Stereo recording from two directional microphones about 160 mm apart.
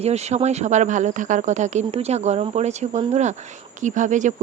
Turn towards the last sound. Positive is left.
turn(degrees=-50)  # may be behind; listen again after turning